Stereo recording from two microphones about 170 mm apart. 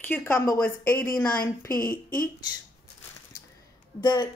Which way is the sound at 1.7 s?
55° left (ahead or behind).